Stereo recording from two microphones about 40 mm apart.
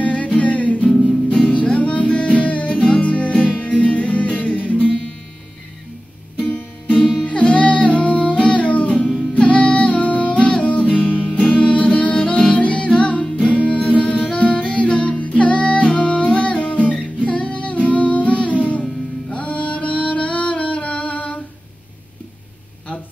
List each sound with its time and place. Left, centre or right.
0.0 s music: left
6.3 s music: left
7.0 s music: centre
7.2 s music: left